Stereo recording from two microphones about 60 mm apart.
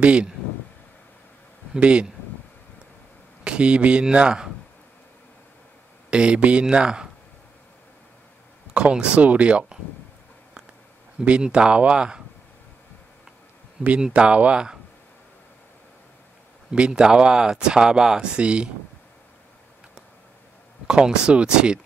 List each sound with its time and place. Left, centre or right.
0.0 s speech: centre
1.8 s speech: centre
3.4 s speech: centre
6.0 s speech: centre
8.8 s speech: centre
11.1 s speech: centre
13.9 s speech: centre
16.7 s speech: centre
20.8 s speech: centre